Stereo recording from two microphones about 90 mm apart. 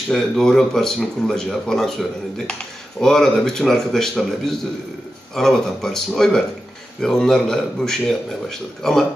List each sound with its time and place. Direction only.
0.1 s speech: 5° left (ahead or behind)